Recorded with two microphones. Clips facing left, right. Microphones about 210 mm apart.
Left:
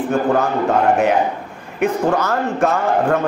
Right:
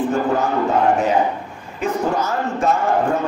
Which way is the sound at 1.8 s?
65° left (ahead or behind).